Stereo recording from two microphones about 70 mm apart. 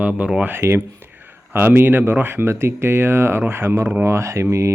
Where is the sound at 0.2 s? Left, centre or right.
Centre.